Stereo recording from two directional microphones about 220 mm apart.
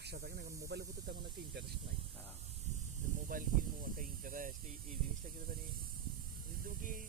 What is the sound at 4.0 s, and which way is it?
Speech, 35° right (ahead or behind).